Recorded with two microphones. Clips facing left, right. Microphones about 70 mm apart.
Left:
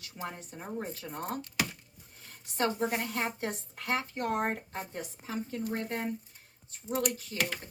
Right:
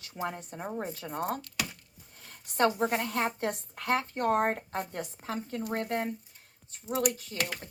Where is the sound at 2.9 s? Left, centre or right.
Right.